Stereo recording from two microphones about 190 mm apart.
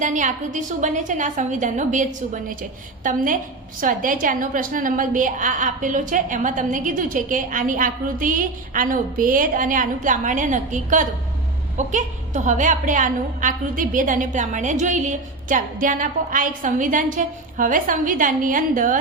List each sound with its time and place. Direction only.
0.0 s a woman's voice: 40° right (ahead or behind)